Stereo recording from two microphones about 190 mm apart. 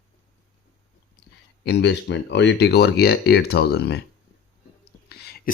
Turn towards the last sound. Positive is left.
turn(degrees=55)  # may be behind; listen again after turning